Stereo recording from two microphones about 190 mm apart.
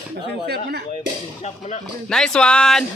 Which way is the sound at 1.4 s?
35° left (ahead or behind).